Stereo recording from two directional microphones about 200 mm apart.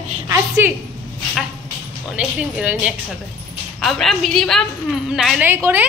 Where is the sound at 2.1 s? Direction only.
5° right (ahead or behind).